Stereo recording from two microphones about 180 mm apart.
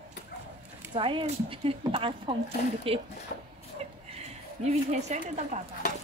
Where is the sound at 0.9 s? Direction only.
30° right (ahead or behind).